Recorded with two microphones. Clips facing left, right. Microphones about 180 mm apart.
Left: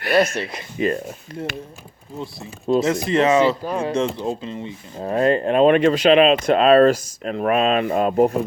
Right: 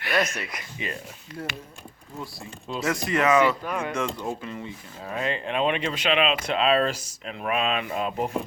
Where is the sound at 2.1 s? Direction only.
25° left (ahead or behind).